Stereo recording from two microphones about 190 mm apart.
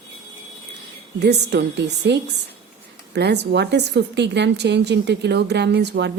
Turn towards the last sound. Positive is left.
turn(degrees=-65)  # may be behind; listen again after turning